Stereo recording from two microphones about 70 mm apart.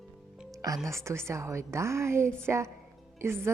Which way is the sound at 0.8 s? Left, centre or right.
Right.